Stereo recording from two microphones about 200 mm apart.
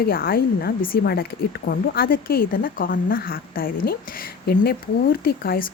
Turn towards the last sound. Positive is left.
turn(degrees=45)  # may be behind; listen again after turning